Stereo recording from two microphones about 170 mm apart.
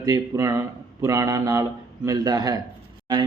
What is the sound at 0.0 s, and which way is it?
A man's voice, 20° right (ahead or behind).